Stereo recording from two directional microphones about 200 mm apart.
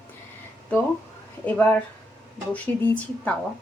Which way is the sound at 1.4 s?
5° left (ahead or behind).